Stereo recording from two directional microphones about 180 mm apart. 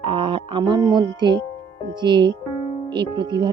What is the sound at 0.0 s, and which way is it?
Speech, 30° right (ahead or behind).